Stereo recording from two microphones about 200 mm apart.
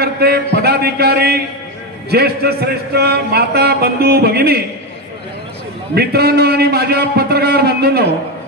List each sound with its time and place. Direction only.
0.0 s a sound: 50° right (ahead or behind)
0.6 s a man's voice: 50° right (ahead or behind)
5.9 s a man's voice: 50° right (ahead or behind)